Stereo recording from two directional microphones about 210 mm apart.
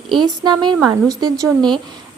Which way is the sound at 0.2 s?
20° right (ahead or behind).